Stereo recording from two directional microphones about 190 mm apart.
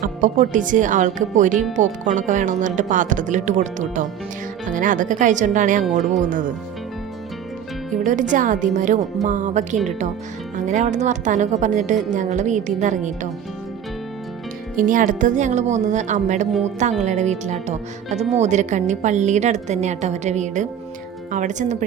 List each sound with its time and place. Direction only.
0.0 s speech: 45° right (ahead or behind)
8.0 s speech: 40° right (ahead or behind)
14.8 s speech: 45° right (ahead or behind)